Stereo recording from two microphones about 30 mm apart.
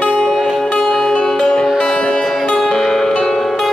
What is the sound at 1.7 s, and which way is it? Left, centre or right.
Music, left.